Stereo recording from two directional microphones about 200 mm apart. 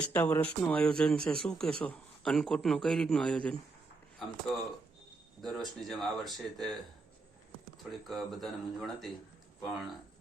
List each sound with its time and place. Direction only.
0.1 s speech: 10° left (ahead or behind)
5.4 s speech: centre (ahead or behind)
7.9 s speech: centre (ahead or behind)